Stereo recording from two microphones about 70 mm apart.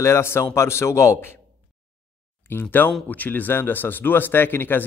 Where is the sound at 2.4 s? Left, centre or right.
Left.